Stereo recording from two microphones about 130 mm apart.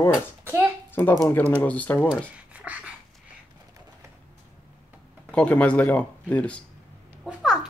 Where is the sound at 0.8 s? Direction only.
15° left (ahead or behind).